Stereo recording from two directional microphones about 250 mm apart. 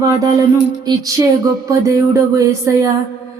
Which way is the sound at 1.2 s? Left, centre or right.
Centre.